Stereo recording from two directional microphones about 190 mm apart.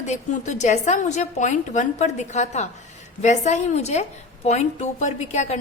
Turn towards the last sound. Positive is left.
turn(degrees=35)  # may be behind; listen again after turning